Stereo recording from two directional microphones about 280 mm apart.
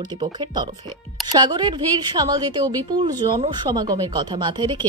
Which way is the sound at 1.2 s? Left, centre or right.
Centre.